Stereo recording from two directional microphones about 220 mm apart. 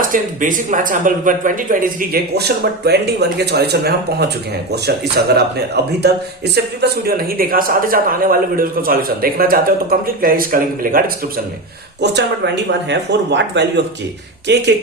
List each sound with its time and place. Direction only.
0.0 s speech: 35° right (ahead or behind)